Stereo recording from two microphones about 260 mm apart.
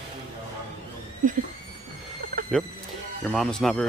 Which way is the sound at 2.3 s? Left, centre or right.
Right.